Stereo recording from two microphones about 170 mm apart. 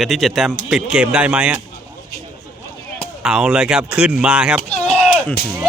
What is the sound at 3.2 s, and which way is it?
A man's voice, 5° right (ahead or behind).